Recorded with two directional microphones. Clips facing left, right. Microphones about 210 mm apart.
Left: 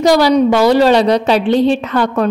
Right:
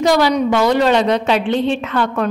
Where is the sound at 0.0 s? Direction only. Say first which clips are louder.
Left 4 dB; 35° left (ahead or behind).